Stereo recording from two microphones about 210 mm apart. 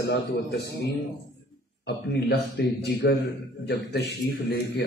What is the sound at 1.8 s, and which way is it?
A man's voice, 50° left (ahead or behind).